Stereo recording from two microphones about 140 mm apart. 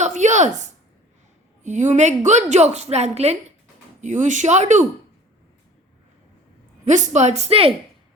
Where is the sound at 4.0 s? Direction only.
60° right (ahead or behind).